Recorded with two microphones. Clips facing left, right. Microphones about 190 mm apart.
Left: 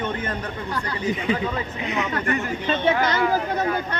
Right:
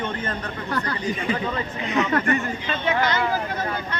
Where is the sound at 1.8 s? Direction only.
15° left (ahead or behind).